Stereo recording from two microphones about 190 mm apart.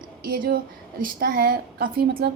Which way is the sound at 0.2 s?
50° right (ahead or behind).